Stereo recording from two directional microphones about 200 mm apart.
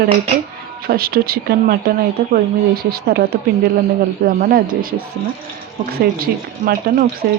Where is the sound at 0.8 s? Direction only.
50° right (ahead or behind).